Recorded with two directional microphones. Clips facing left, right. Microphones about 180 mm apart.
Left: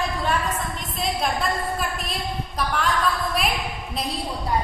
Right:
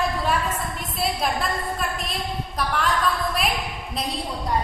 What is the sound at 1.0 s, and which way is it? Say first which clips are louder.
A woman's voice: even; centre (ahead or behind).